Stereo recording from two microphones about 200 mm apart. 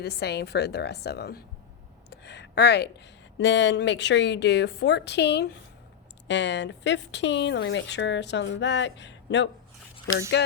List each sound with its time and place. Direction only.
0.0 s speech: 55° left (ahead or behind)
2.0 s a sound: 60° left (ahead or behind)
3.3 s speech: 65° left (ahead or behind)